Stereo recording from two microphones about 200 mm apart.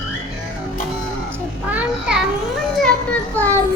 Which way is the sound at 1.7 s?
5° right (ahead or behind).